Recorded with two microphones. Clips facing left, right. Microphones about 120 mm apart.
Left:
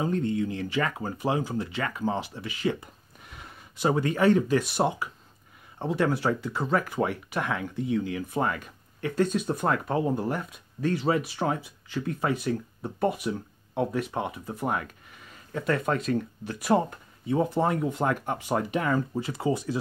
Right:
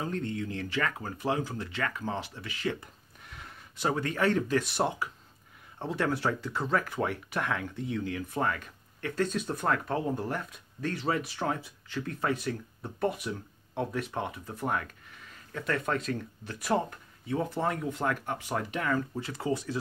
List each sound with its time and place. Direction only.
0.0 s speech: 15° left (ahead or behind)
16.9 s speech: 20° left (ahead or behind)